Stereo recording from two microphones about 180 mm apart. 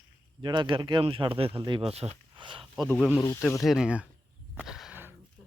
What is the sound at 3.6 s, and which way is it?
Speech, 5° right (ahead or behind).